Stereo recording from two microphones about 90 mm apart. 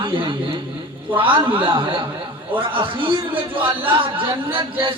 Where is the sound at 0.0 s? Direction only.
70° right (ahead or behind).